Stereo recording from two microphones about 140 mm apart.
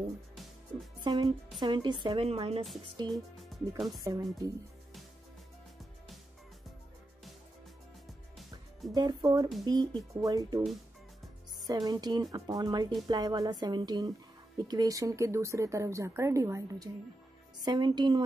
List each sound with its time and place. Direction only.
1.0 s a woman's voice: 30° right (ahead or behind); by 2.6 s 45° right (ahead or behind)
3.1 s speech: centre (ahead or behind)
4.0 s speech: 25° right (ahead or behind)
8.9 s speech: 30° right (ahead or behind)
11.6 s a woman's voice: 30° right (ahead or behind)